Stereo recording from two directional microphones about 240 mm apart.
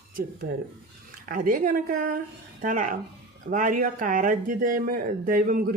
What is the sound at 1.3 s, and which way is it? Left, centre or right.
Speech, right.